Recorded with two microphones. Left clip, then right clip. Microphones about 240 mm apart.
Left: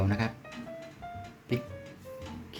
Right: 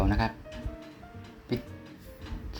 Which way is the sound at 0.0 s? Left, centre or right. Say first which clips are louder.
Right 3 dB; centre.